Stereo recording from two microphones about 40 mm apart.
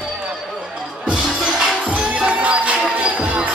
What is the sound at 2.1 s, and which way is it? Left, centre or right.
Music, right.